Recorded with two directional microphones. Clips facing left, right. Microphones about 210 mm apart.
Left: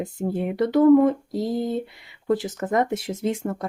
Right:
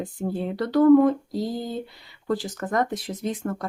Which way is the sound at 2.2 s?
20° left (ahead or behind).